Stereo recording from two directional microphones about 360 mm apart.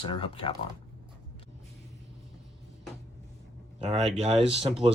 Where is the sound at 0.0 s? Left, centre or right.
Centre.